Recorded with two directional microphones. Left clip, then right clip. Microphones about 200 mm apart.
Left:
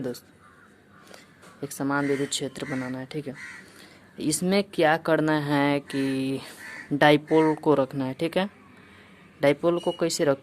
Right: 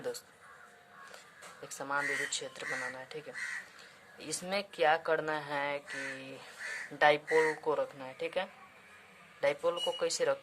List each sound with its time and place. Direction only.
1.6 s speech: 35° left (ahead or behind)